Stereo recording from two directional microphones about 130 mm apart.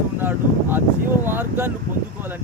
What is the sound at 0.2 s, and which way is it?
Speech, 15° right (ahead or behind).